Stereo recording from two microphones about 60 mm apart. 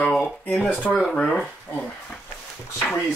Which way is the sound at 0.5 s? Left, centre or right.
Left.